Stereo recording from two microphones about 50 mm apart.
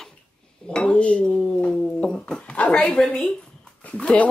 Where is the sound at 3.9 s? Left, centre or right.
Left.